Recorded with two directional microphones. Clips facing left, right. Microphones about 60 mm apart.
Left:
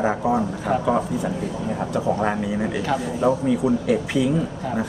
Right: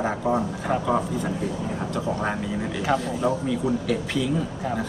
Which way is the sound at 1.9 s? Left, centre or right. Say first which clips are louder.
Left 5 dB; centre.